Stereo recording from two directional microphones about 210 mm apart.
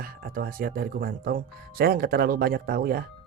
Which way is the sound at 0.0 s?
45° right (ahead or behind).